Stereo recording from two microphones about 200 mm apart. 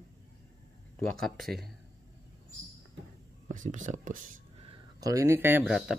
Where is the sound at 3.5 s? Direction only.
40° right (ahead or behind).